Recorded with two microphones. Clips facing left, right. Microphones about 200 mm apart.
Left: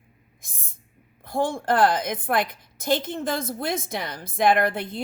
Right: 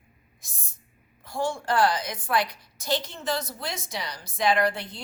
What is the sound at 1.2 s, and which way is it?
A woman's voice, 55° left (ahead or behind).